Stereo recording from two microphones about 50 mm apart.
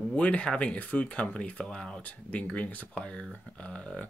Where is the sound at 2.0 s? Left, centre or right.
Left.